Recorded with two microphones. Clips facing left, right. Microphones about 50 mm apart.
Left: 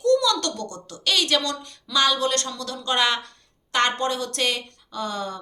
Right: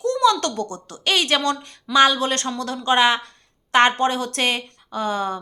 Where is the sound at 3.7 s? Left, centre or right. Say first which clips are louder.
Right 6 dB; right.